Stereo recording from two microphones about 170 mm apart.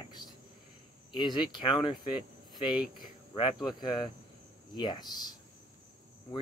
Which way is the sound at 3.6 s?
25° left (ahead or behind).